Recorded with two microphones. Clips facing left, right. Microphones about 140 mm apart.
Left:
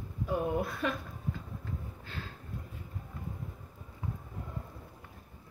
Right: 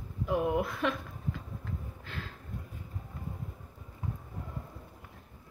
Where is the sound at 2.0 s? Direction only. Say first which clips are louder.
Right 1 dB; 60° right (ahead or behind).